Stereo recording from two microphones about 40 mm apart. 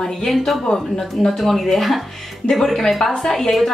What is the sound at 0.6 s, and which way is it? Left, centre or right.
Speech, left.